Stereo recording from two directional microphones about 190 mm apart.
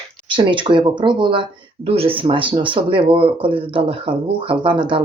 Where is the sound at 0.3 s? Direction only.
25° right (ahead or behind).